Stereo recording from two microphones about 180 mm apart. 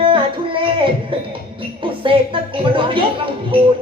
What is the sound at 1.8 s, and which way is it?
Music, 30° right (ahead or behind).